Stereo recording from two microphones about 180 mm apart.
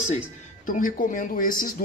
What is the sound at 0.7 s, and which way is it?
Speech, 50° left (ahead or behind).